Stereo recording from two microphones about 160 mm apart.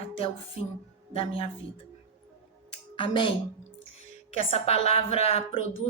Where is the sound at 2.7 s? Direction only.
30° left (ahead or behind).